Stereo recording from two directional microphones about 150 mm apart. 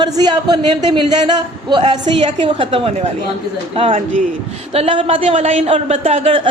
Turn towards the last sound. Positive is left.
turn(degrees=-40)  # may be behind; listen again after turning